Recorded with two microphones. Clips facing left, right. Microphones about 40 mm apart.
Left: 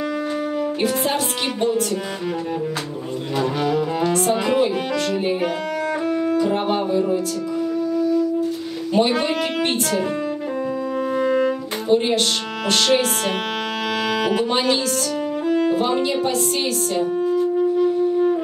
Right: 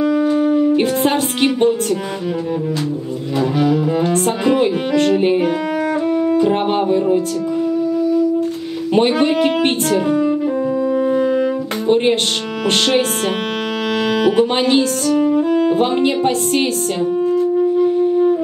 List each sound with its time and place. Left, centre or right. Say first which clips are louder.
0.0 s music: right 9 dB; centre
0.7 s music: right 5 dB; right
3.3 s cello: right 5 dB; centre
4.6 s music: right 4 dB; right
6.0 s music: right 4 dB; centre
6.3 s music: right 4 dB; right
7.9 s music: right 2 dB; centre
8.9 s music: right 5 dB; right
11.0 s music: right 1 dB; centre
14.3 s music: right 5 dB; right
15.2 s music: right 3 dB; centre
15.7 s music: right 4 dB; right
17.0 s music: right 5 dB; centre